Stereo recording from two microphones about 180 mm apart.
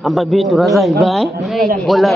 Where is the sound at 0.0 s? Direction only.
Centre (ahead or behind).